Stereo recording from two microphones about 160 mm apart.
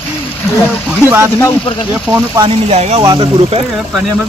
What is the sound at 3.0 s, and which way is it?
Speech, 30° right (ahead or behind).